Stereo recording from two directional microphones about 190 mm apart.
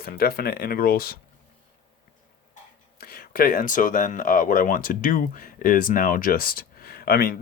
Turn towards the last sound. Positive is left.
turn(degrees=55)  # may be behind; listen again after turning